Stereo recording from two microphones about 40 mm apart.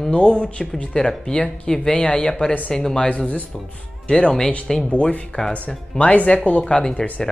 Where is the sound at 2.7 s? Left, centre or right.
Centre.